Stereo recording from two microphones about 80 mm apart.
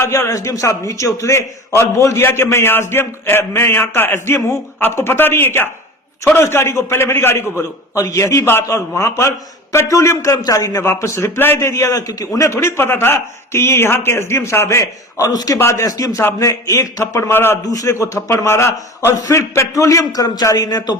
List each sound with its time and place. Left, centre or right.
0.3 s a man's voice: left
11.9 s a man's voice: left
15.5 s a man's voice: left
17.7 s a man's voice: left